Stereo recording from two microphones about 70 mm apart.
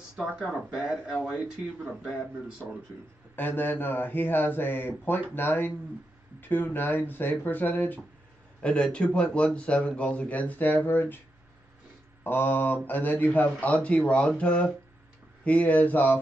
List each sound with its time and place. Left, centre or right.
0.1 s speech: centre
3.3 s speech: left
8.6 s speech: centre
12.2 s speech: left